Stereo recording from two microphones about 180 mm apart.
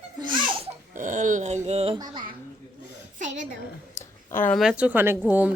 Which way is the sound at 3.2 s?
45° right (ahead or behind).